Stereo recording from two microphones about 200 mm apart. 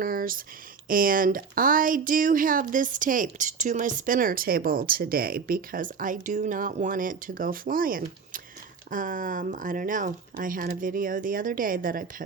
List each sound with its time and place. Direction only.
0.0 s speech: 45° right (ahead or behind)